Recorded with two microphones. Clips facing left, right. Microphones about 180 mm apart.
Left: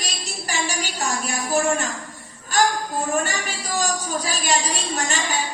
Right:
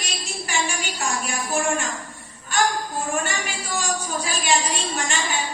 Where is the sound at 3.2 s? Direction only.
40° left (ahead or behind).